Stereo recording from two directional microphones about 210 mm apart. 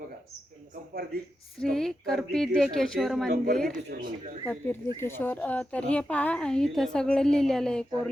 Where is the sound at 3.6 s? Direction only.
50° right (ahead or behind).